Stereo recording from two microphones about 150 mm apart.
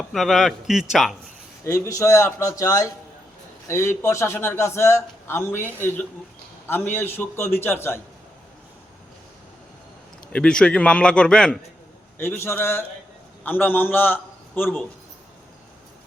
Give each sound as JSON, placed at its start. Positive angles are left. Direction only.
{"t": 0.0, "sound": "speech", "side_deg": 0}
{"t": 1.6, "sound": "a man's voice", "side_deg": 20}
{"t": 10.3, "sound": "a man's voice", "side_deg": 5}
{"t": 12.4, "sound": "a man's voice", "side_deg": 15}